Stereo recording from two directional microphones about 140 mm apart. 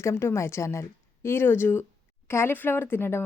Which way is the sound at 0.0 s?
20° left (ahead or behind).